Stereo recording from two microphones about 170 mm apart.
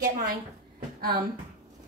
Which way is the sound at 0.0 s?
60° right (ahead or behind).